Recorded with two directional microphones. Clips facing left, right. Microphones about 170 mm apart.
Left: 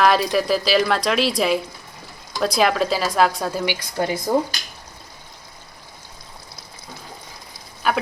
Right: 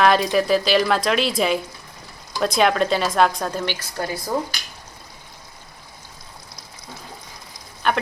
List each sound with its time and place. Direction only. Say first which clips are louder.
0.0 s speech: even; centre (ahead or behind)
3.9 s speech: left 6 dB; 20° left (ahead or behind)
7.8 s speech: even; 5° left (ahead or behind)